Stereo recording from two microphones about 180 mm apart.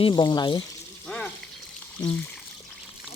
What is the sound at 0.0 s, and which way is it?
Speech, 25° left (ahead or behind).